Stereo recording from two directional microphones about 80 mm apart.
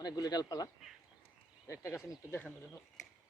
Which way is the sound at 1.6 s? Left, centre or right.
Left.